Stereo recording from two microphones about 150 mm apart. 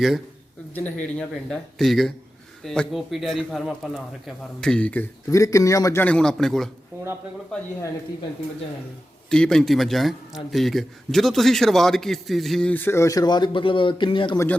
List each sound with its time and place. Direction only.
0.7 s a man's voice: 10° left (ahead or behind)
5.3 s a man's voice: 20° left (ahead or behind); by 6.7 s centre (ahead or behind)
9.3 s a man's voice: 5° left (ahead or behind); by 14.3 s 35° left (ahead or behind)
14.3 s a man's voice: 10° left (ahead or behind)